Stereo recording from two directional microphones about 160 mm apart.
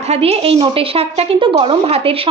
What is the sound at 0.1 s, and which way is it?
Speech, 40° right (ahead or behind).